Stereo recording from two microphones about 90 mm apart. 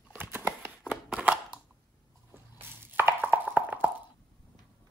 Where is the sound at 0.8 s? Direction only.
10° right (ahead or behind).